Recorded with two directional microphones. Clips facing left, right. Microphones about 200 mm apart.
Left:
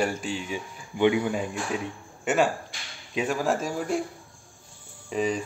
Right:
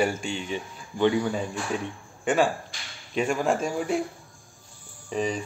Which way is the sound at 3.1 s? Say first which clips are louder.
Right 1 dB; 5° left (ahead or behind).